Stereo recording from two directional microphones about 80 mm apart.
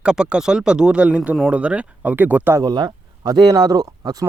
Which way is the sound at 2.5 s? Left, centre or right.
Right.